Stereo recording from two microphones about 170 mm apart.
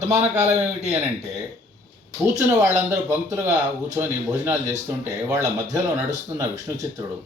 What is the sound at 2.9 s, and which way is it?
Speech, 15° right (ahead or behind).